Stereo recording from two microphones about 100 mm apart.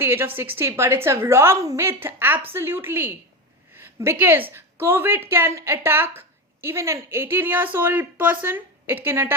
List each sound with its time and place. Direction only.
0.0 s a woman's voice: 25° right (ahead or behind)